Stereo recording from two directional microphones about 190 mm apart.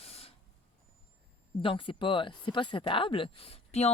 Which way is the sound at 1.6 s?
25° left (ahead or behind).